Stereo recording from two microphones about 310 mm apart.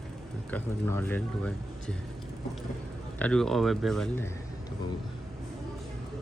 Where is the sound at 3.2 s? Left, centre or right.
Centre.